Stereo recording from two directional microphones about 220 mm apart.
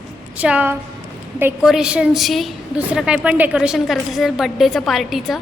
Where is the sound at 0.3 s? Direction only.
5° right (ahead or behind).